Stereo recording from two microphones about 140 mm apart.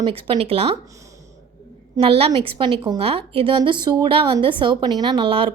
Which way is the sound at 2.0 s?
45° right (ahead or behind).